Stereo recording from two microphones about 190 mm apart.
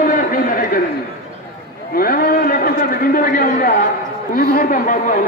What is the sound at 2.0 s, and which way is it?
A man's voice, 50° left (ahead or behind).